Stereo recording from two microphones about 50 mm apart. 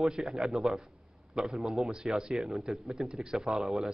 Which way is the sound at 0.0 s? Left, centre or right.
Centre.